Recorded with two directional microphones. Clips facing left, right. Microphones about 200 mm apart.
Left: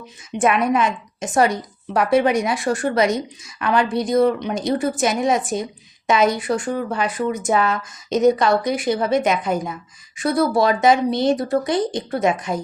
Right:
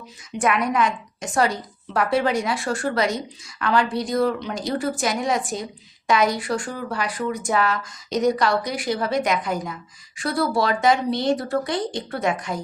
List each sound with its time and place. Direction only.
0.3 s a woman's voice: 25° left (ahead or behind)